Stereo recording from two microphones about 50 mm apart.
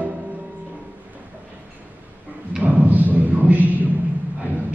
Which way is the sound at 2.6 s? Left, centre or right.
Right.